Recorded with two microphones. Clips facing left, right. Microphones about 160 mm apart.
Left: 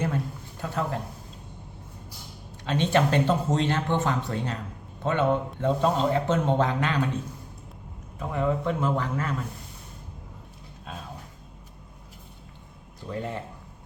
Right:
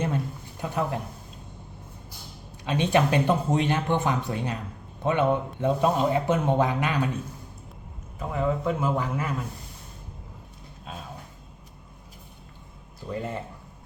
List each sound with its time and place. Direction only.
0.6 s a sound: 15° right (ahead or behind)
2.6 s a man's voice: 15° right (ahead or behind)
8.2 s a man's voice: centre (ahead or behind)
13.1 s speech: centre (ahead or behind)